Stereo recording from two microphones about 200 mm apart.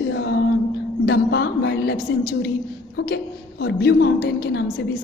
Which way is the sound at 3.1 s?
55° left (ahead or behind).